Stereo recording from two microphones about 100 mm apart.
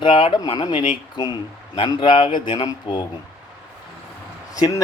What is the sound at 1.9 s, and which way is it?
A man's voice, 55° left (ahead or behind).